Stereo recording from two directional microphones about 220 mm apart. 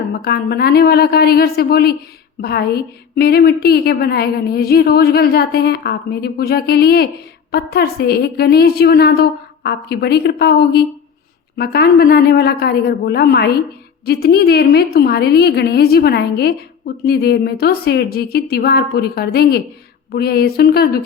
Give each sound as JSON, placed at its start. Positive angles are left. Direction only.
{"t": 0.2, "sound": "a woman's voice", "side_deg": 45}